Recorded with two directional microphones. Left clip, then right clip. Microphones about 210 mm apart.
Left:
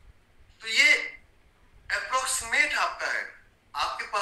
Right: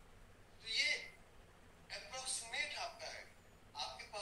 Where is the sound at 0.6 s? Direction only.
45° left (ahead or behind).